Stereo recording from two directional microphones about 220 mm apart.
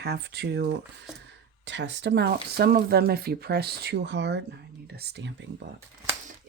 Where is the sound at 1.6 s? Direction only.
55° right (ahead or behind).